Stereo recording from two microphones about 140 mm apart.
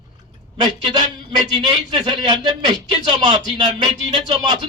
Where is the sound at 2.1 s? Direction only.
35° right (ahead or behind).